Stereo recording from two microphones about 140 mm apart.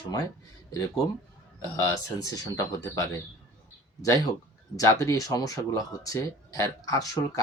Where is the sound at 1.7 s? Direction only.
25° left (ahead or behind).